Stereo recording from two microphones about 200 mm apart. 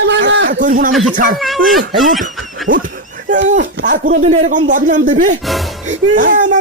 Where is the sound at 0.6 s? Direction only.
40° right (ahead or behind).